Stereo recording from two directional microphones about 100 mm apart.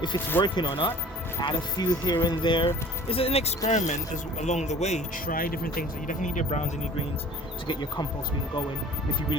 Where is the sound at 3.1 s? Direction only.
80° left.